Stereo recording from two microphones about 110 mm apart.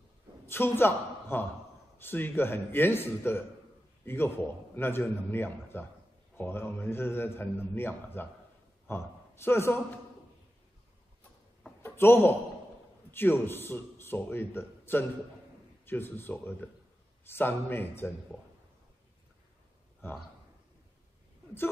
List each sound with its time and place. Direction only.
0.5 s a man's voice: 20° left (ahead or behind)
11.8 s a woman's voice: 20° left (ahead or behind)